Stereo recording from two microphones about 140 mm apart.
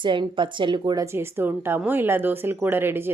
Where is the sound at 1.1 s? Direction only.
15° right (ahead or behind).